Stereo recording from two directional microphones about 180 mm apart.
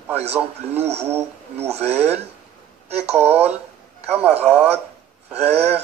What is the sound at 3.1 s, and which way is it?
Speech, 10° right (ahead or behind).